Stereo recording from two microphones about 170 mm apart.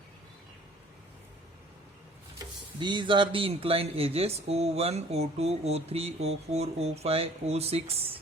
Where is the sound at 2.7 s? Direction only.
25° right (ahead or behind).